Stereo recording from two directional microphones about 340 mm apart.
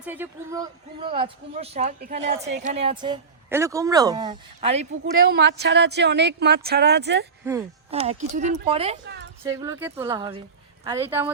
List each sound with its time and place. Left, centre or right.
0.0 s speech: centre
5.3 s speech: right
7.4 s speech: centre